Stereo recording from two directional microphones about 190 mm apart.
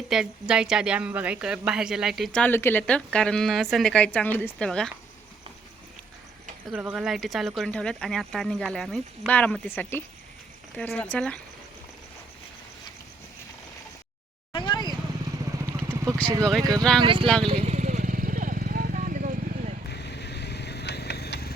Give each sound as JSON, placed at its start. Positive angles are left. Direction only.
{"t": 0.1, "sound": "a woman's voice", "side_deg": -5}
{"t": 6.7, "sound": "a woman's voice", "side_deg": -5}
{"t": 14.5, "sound": "vehicle", "side_deg": 25}
{"t": 15.5, "sound": "vehicle", "side_deg": -15}
{"t": 16.4, "sound": "a woman's voice", "side_deg": 0}
{"t": 17.0, "sound": "speech", "side_deg": -25}
{"t": 17.4, "sound": "vehicle", "side_deg": -30}
{"t": 19.9, "sound": "vehicle", "side_deg": 60}